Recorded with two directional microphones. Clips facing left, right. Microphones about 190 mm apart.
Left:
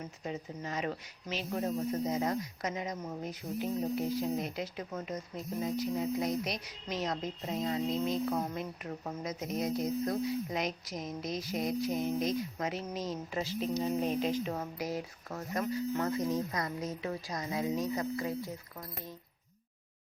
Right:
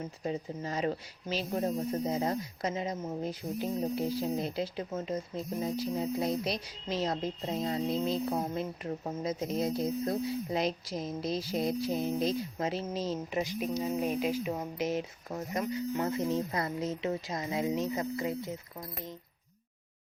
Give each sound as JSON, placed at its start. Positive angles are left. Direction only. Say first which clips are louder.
{"t": 0.3, "sound": "speech", "louder": "right 4 dB", "side_deg": -35}
{"t": 13.4, "sound": "speech", "louder": "left 3 dB", "side_deg": -15}
{"t": 14.8, "sound": "speech", "louder": "right 4 dB", "side_deg": -25}